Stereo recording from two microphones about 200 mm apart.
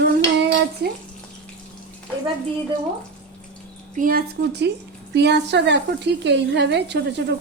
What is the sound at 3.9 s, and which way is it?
A woman's voice, 45° right (ahead or behind).